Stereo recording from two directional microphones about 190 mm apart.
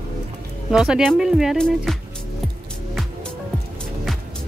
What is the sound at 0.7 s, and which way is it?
Speech, centre (ahead or behind).